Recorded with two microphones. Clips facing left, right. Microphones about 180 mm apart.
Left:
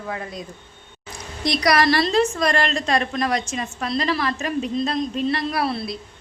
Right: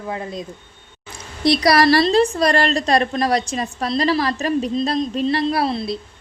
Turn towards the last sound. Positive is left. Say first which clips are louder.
# right 4 dB
turn(degrees=-25)  # may be behind; listen again after turning